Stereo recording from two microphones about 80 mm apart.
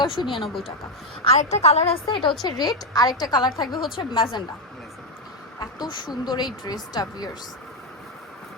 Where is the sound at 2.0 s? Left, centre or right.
Left.